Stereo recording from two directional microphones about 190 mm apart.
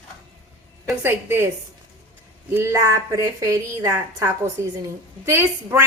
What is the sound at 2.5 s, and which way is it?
A woman's voice, 15° right (ahead or behind).